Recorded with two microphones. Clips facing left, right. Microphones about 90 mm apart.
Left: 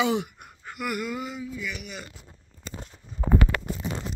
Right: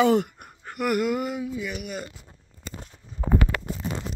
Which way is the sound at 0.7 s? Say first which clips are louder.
Right 7 dB; 55° right (ahead or behind).